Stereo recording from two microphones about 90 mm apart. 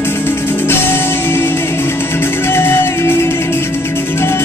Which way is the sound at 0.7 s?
25° left (ahead or behind).